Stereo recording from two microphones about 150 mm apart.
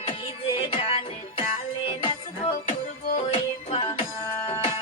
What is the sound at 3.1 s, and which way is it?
Music, 40° left (ahead or behind).